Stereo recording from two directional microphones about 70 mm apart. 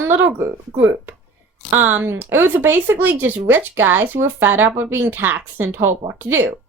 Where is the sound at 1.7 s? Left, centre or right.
Right.